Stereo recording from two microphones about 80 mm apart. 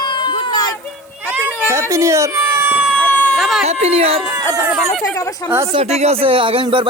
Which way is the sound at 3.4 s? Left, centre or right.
Centre.